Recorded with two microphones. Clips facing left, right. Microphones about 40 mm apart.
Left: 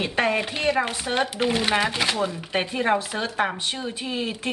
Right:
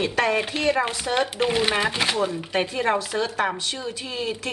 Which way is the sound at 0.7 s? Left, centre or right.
Left.